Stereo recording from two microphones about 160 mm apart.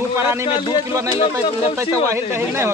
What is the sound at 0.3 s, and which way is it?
Speech, 15° right (ahead or behind).